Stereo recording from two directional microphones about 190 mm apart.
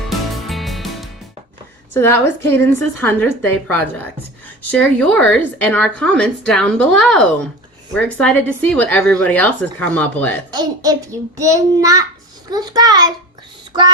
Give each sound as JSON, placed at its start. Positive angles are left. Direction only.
{"t": 0.1, "sound": "music", "side_deg": 0}
{"t": 1.9, "sound": "speech", "side_deg": 10}
{"t": 4.7, "sound": "speech", "side_deg": 5}
{"t": 10.5, "sound": "a child's voice", "side_deg": -20}